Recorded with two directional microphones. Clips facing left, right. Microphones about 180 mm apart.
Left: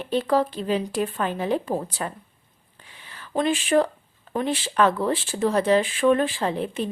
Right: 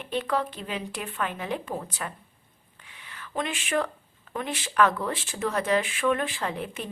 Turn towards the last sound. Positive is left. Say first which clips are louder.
# left 6 dB
turn(degrees=30)  # may be behind; listen again after turning